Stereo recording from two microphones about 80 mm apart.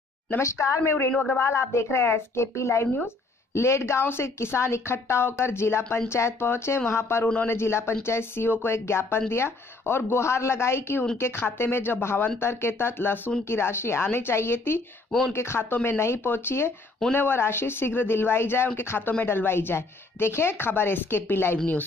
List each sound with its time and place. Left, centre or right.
0.3 s a woman's voice: left
1.1 s speech: centre
1.4 s a woman's voice: left
15.0 s speech: centre
15.3 s a woman's voice: left